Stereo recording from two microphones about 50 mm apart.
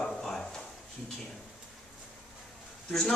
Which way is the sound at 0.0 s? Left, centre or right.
Centre.